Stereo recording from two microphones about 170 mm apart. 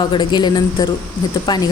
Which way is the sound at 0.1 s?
25° left (ahead or behind).